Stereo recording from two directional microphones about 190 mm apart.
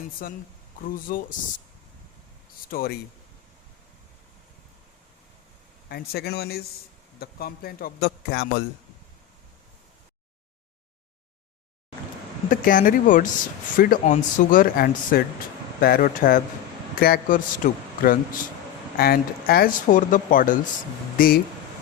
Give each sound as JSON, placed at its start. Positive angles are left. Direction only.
{"t": 0.2, "sound": "speech", "side_deg": 50}
{"t": 2.6, "sound": "speech", "side_deg": 50}
{"t": 5.9, "sound": "speech", "side_deg": 55}
{"t": 12.5, "sound": "speech", "side_deg": 45}